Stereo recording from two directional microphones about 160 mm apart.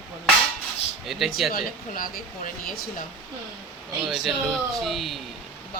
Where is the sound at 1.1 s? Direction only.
Centre (ahead or behind).